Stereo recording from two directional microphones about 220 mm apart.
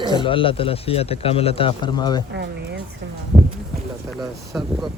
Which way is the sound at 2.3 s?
50° right (ahead or behind).